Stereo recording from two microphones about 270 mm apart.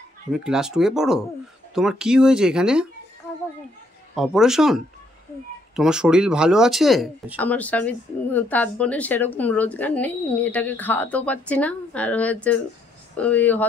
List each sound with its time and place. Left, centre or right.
0.3 s speech: centre
4.1 s speech: centre
5.8 s speech: centre